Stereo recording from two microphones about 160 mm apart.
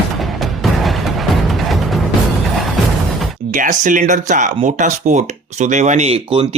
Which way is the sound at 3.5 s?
55° right (ahead or behind).